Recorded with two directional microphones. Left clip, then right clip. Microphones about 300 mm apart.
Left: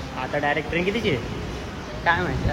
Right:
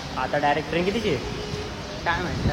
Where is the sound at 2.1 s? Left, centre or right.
Left.